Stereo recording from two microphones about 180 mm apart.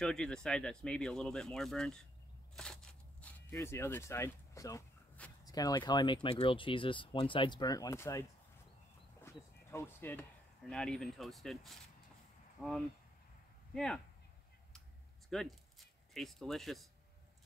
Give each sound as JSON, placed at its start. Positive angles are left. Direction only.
{"t": 0.0, "sound": "speech", "side_deg": 5}
{"t": 2.5, "sound": "a sound", "side_deg": 5}
{"t": 5.4, "sound": "speech", "side_deg": 20}
{"t": 9.2, "sound": "speech", "side_deg": 15}
{"t": 13.7, "sound": "speech", "side_deg": 5}
{"t": 15.2, "sound": "speech", "side_deg": 0}